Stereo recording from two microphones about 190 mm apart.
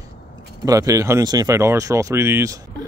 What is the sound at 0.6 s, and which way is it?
Speech, 15° right (ahead or behind).